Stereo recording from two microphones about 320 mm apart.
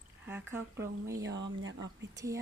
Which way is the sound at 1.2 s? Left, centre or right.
Right.